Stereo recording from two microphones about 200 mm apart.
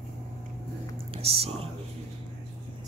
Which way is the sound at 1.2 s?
30° right (ahead or behind).